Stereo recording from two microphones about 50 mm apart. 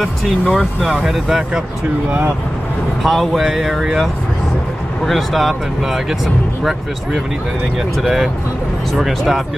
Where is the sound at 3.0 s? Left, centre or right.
Centre.